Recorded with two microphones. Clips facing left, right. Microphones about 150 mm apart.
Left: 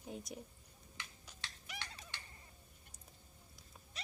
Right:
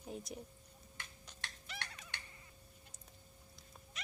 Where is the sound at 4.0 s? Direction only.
30° left (ahead or behind).